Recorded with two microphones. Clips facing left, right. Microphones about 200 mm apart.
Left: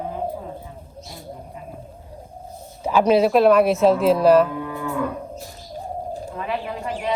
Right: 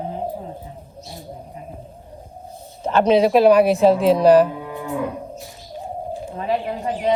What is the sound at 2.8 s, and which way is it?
Speech, 10° left (ahead or behind).